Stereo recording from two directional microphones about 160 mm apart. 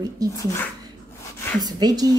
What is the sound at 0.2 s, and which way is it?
Speech, 25° right (ahead or behind).